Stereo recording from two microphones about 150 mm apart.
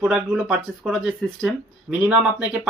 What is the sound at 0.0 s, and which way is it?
Speech, 10° right (ahead or behind).